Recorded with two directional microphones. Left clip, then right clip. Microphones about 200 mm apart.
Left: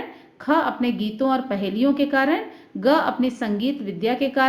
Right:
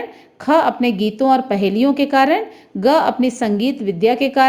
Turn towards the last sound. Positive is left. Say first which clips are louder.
# right 7 dB
turn(degrees=-30)  # may be behind; listen again after turning